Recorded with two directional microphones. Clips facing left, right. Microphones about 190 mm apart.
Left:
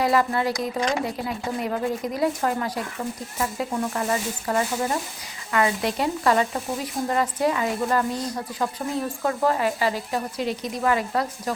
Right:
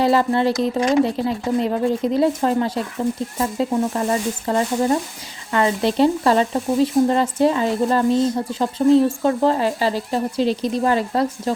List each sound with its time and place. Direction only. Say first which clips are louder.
0.0 s speech: right 5 dB; 30° right (ahead or behind)